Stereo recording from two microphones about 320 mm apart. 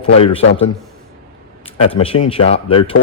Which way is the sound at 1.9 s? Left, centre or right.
Centre.